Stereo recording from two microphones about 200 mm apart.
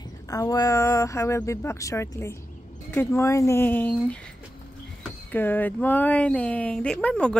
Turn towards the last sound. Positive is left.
turn(degrees=5)  # may be behind; listen again after turning